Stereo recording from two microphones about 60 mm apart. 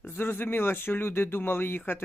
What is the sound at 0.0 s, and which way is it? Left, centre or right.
Speech, left.